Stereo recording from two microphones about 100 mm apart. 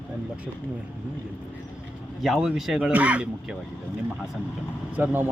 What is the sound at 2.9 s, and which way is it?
Speech, 15° right (ahead or behind).